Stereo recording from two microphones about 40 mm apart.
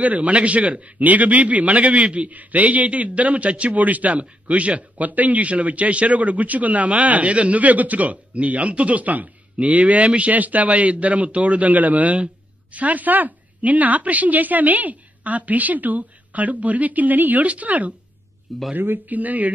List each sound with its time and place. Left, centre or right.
0.0 s a man's voice: right
18.8 s a woman's voice: right